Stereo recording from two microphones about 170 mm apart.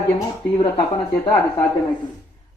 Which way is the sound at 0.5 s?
25° left (ahead or behind).